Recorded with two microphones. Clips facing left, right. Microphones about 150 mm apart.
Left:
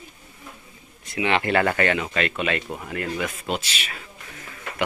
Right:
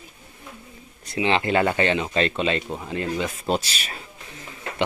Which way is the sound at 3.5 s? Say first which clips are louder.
Right 4 dB; 35° right (ahead or behind).